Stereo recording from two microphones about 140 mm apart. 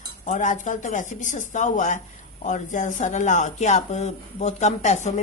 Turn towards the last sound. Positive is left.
turn(degrees=55)  # may be behind; listen again after turning